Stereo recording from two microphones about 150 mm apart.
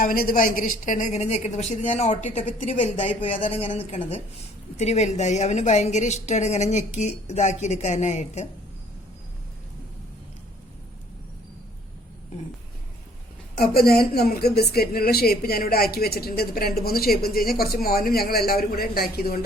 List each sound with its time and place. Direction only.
0.0 s a woman's voice: 75° left (ahead or behind); by 3.0 s 50° left (ahead or behind)
3.0 s a woman's voice: 40° left (ahead or behind)
13.6 s a woman's voice: 90° left